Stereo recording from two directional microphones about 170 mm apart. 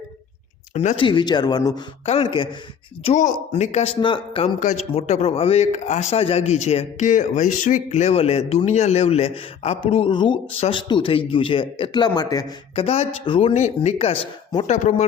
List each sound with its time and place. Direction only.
0.7 s speech: 40° left (ahead or behind)
1.0 s speech: 25° left (ahead or behind)
3.0 s speech: 40° left (ahead or behind)
4.6 s speech: 45° left (ahead or behind); by 12.5 s 20° left (ahead or behind)
12.7 s speech: 35° left (ahead or behind)
13.5 s speech: 45° left (ahead or behind)
14.7 s speech: 45° left (ahead or behind)